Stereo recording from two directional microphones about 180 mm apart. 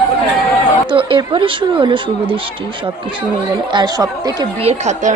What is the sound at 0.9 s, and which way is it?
Speech, 25° right (ahead or behind).